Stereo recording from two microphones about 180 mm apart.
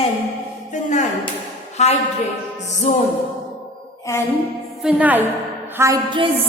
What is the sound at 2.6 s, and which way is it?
Music, 40° left (ahead or behind).